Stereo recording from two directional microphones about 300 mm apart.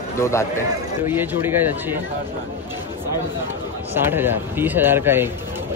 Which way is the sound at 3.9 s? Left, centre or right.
Centre.